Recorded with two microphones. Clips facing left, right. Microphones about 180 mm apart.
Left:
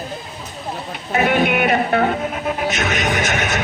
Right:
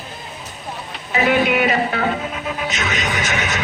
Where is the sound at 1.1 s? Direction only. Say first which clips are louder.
Even; 55° left (ahead or behind).